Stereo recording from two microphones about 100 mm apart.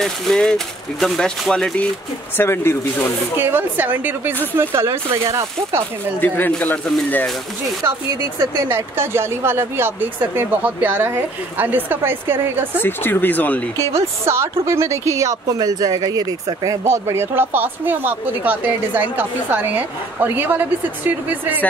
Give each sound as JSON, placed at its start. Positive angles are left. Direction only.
{"t": 0.0, "sound": "speech", "side_deg": 5}
{"t": 2.3, "sound": "speech", "side_deg": 25}
{"t": 3.3, "sound": "speech", "side_deg": -20}
{"t": 6.2, "sound": "speech", "side_deg": 20}
{"t": 8.4, "sound": "speech", "side_deg": -25}
{"t": 12.8, "sound": "speech", "side_deg": 20}
{"t": 14.2, "sound": "speech", "side_deg": -25}